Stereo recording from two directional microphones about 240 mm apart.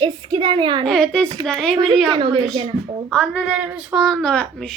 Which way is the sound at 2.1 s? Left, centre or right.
Centre.